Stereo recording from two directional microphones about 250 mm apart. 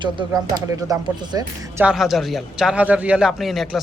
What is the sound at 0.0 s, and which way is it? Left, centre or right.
Speech, centre.